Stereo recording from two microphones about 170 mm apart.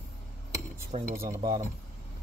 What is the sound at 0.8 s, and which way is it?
Speech, 45° right (ahead or behind).